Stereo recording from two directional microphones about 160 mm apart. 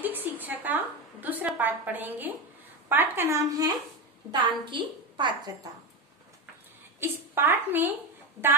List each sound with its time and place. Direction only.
0.1 s a sound: 10° right (ahead or behind)
2.9 s a woman's voice: 15° right (ahead or behind)
7.0 s a woman's voice: 15° right (ahead or behind)